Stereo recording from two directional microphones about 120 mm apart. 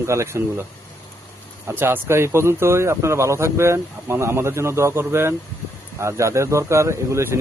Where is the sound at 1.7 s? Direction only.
20° right (ahead or behind).